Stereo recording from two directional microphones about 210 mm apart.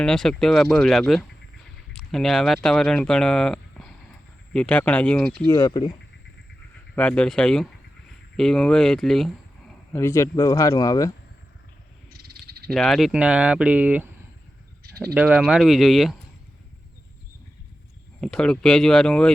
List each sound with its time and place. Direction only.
0.0 s speech: 5° left (ahead or behind)
5.5 s speech: 20° left (ahead or behind)
6.9 s speech: 5° left (ahead or behind)
9.9 s speech: 15° left (ahead or behind)
12.1 s frog: 50° right (ahead or behind)
12.7 s speech: centre (ahead or behind)
15.1 s speech: 5° right (ahead or behind)
18.2 s speech: 5° left (ahead or behind)